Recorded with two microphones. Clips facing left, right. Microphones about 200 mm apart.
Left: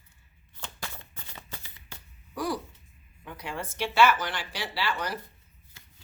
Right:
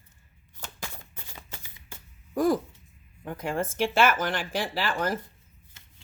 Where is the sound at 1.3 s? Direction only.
10° right (ahead or behind).